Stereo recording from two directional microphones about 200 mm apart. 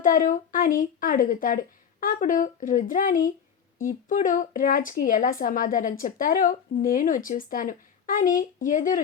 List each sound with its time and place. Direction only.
0.0 s speech: 40° left (ahead or behind)